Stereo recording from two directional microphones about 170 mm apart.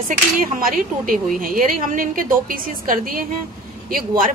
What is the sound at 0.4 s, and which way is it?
A woman's voice, 55° right (ahead or behind).